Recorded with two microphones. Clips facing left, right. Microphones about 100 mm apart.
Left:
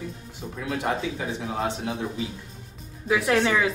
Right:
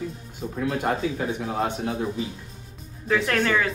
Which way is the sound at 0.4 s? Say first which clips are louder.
Right 4 dB; 25° right (ahead or behind).